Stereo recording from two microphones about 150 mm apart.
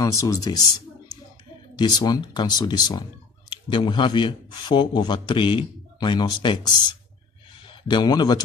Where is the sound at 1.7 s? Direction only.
25° left (ahead or behind).